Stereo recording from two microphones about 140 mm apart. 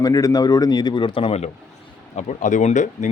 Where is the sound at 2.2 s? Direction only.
60° left (ahead or behind).